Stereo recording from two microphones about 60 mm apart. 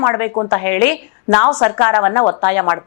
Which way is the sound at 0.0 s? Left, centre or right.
Left.